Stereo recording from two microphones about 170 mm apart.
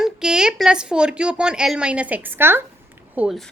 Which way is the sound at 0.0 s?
5° right (ahead or behind).